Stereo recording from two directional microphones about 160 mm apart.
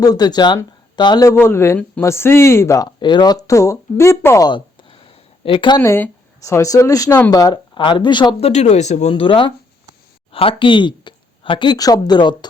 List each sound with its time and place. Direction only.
0.0 s speech: 25° left (ahead or behind)
1.3 s speech: 15° left (ahead or behind)
4.4 s a sound: 30° left (ahead or behind)
5.8 s speech: 15° left (ahead or behind)